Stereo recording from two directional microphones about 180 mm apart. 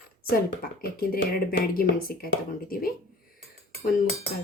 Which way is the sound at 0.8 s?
55° left (ahead or behind).